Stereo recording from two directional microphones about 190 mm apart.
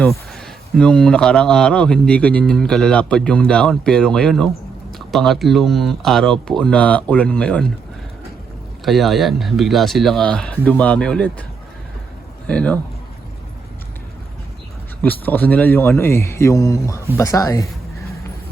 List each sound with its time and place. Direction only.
0.0 s speech: 5° left (ahead or behind)
8.8 s speech: centre (ahead or behind)
12.5 s a man's voice: 5° left (ahead or behind)
15.0 s a man's voice: 10° left (ahead or behind)